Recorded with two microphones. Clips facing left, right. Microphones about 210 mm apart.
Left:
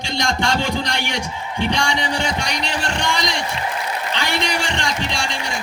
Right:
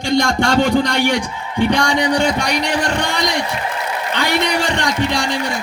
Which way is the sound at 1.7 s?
55° right (ahead or behind).